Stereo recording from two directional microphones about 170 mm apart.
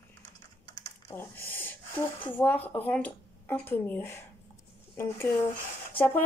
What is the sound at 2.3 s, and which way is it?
Speech, 10° left (ahead or behind).